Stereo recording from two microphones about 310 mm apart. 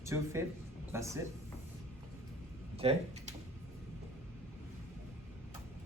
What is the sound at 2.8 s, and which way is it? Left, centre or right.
Speech, centre.